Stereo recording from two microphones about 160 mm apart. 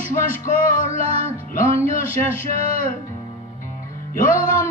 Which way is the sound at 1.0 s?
40° right (ahead or behind).